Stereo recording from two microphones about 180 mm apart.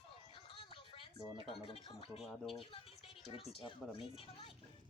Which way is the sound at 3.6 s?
30° left (ahead or behind).